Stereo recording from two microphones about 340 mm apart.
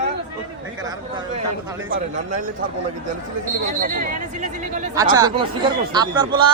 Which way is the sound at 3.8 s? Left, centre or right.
Right.